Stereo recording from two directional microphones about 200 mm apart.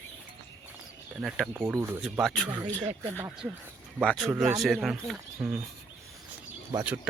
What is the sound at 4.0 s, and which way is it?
Speech, 5° left (ahead or behind).